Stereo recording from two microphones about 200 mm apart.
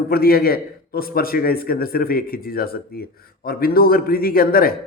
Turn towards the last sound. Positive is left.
turn(degrees=45)  # may be behind; listen again after turning